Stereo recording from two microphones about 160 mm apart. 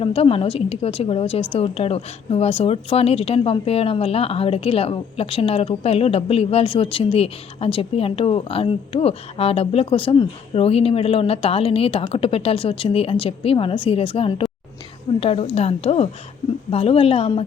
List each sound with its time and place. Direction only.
0.0 s a woman's voice: 35° left (ahead or behind)